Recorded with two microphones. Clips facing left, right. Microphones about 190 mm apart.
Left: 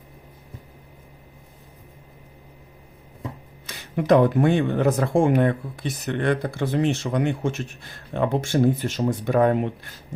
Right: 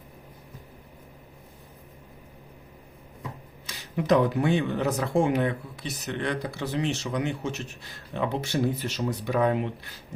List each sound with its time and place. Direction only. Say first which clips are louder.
3.7 s speech: left 5 dB; 55° left (ahead or behind)